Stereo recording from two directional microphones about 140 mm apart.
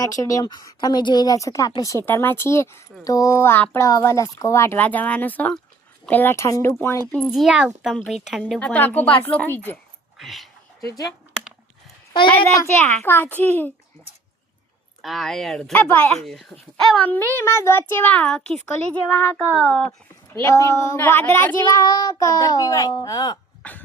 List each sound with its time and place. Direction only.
0.0 s a woman's voice: 25° left (ahead or behind); by 7.4 s 10° left (ahead or behind)
7.4 s a child's voice: 5° right (ahead or behind); by 9.7 s 15° left (ahead or behind)
10.2 s a sound: centre (ahead or behind)
10.8 s a woman's voice: 25° left (ahead or behind)
12.5 s speech: 15° left (ahead or behind)
15.0 s speech: centre (ahead or behind)
20.4 s a woman's voice: 20° left (ahead or behind)
23.6 s speech: 10° left (ahead or behind)